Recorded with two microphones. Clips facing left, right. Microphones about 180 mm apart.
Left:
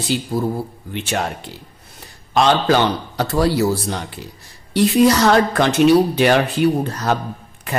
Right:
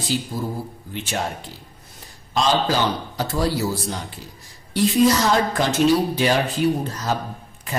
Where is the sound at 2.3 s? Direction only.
65° left (ahead or behind).